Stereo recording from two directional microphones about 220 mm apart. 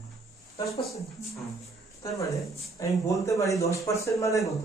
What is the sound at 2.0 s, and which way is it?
A man's voice, 15° left (ahead or behind).